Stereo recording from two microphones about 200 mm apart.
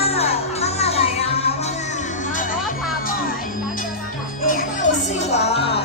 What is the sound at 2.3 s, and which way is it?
Music, 40° left (ahead or behind).